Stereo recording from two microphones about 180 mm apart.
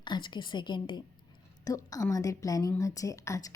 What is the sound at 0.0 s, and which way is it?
A woman's voice, 25° left (ahead or behind).